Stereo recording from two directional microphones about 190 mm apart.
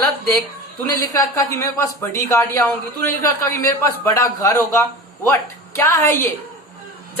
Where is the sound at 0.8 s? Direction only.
15° left (ahead or behind).